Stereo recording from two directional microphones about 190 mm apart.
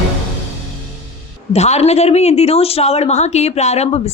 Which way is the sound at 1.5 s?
35° left (ahead or behind).